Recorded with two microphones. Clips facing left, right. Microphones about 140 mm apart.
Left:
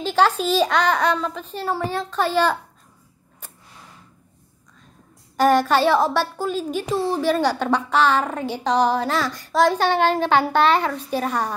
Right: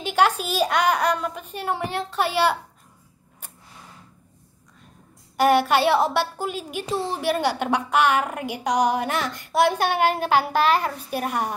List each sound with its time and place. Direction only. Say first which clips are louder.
0.0 s a child's voice: left 2 dB; 10° right (ahead or behind)
5.4 s a child's voice: left 1 dB; 15° right (ahead or behind)
10.4 s a child's voice: left 3 dB; 35° left (ahead or behind)
11.0 s a child's voice: left 3 dB; 10° right (ahead or behind)